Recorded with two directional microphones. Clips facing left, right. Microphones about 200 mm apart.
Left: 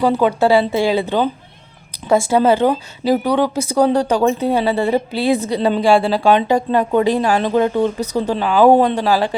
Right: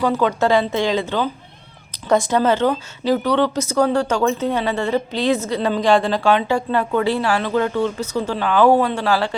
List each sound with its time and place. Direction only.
0.0 s speech: 15° left (ahead or behind)